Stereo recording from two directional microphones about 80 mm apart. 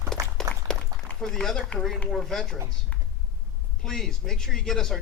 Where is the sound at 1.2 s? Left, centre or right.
Centre.